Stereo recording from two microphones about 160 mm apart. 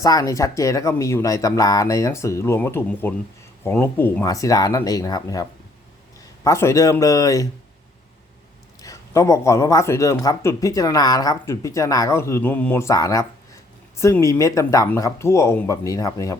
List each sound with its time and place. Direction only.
0.0 s speech: 20° left (ahead or behind)
8.8 s speech: 20° left (ahead or behind)